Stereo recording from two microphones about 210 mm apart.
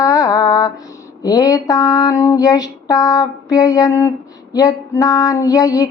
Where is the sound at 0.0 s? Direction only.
15° left (ahead or behind).